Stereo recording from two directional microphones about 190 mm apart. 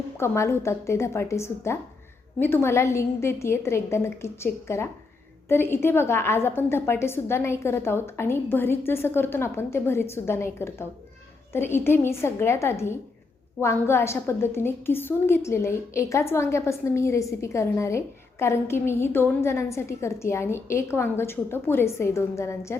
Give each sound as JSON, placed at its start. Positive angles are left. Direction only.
{"t": 0.2, "sound": "a woman's voice", "side_deg": 15}